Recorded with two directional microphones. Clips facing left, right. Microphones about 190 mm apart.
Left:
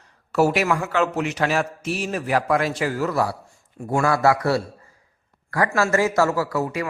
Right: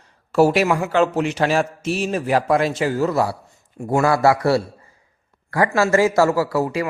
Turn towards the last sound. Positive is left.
turn(degrees=-30)  # may be behind; listen again after turning